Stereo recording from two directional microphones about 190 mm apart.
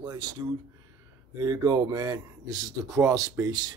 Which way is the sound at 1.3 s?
20° right (ahead or behind).